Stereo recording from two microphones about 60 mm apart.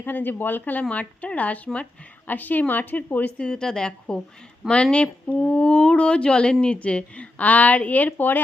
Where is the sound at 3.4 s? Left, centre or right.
Centre.